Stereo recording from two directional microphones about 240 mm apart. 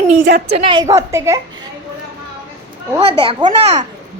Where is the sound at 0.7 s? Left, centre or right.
Centre.